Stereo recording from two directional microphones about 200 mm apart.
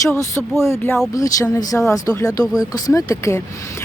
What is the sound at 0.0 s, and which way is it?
Speech, 15° left (ahead or behind).